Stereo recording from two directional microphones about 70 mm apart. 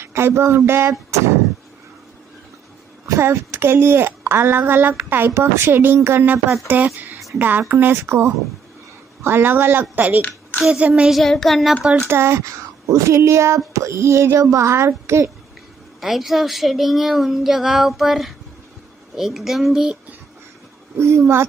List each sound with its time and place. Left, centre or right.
0.0 s speech: right
3.2 s a woman's voice: right
11.1 s speech: centre
11.7 s speech: centre
12.1 s a child's voice: right
16.0 s speech: centre
21.0 s speech: right